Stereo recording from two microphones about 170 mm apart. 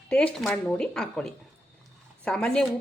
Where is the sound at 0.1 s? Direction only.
5° left (ahead or behind).